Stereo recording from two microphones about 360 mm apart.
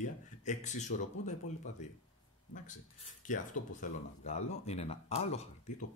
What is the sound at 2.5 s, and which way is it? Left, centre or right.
Speech, left.